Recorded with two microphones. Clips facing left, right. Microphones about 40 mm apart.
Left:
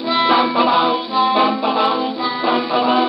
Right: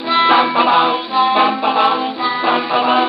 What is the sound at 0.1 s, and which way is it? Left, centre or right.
Music, centre.